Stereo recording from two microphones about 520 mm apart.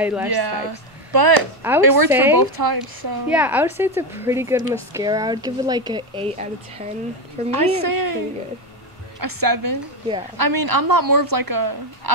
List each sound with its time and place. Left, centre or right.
0.0 s speech: centre
0.3 s speech: right
1.6 s speech: centre
2.5 s speech: right
3.3 s a woman's voice: centre
7.5 s speech: right
9.2 s speech: right